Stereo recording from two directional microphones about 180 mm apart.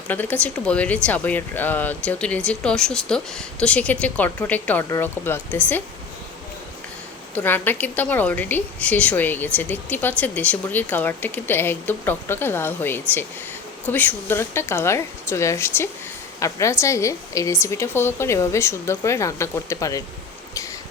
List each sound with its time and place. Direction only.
0.1 s a woman's voice: 10° left (ahead or behind)
7.3 s a woman's voice: 10° left (ahead or behind)